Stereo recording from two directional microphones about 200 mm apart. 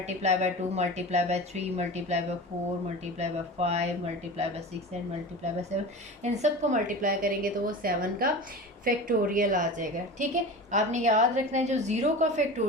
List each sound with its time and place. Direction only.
0.0 s speech: 35° right (ahead or behind)
5.7 s a woman's voice: 35° right (ahead or behind)